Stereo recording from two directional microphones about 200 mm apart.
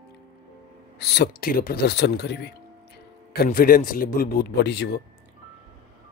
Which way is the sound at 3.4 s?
45° left (ahead or behind).